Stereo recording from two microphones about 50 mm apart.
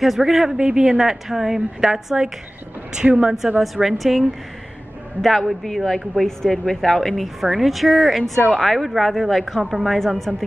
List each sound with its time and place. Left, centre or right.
0.0 s a woman's voice: centre
0.6 s a woman's voice: centre
3.1 s a woman's voice: right
3.5 s a woman's voice: centre
5.5 s a woman's voice: centre
9.9 s a woman's voice: centre